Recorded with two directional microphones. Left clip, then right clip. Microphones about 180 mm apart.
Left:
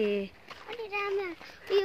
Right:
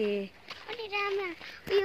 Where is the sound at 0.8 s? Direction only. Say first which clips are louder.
Right 1 dB; 20° left (ahead or behind).